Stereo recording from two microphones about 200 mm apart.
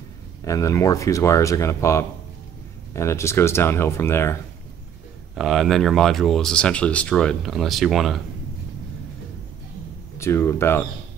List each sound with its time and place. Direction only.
0.4 s speech: 15° left (ahead or behind)
5.3 s speech: centre (ahead or behind)
10.1 s speech: 15° left (ahead or behind)